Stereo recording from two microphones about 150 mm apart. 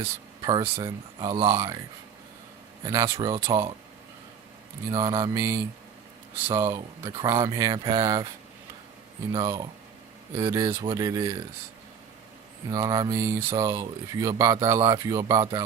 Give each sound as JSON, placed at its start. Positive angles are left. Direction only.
{"t": 0.0, "sound": "speech", "side_deg": -25}
{"t": 2.8, "sound": "speech", "side_deg": -20}
{"t": 4.9, "sound": "speech", "side_deg": -25}
{"t": 9.3, "sound": "speech", "side_deg": -30}
{"t": 12.7, "sound": "speech", "side_deg": -25}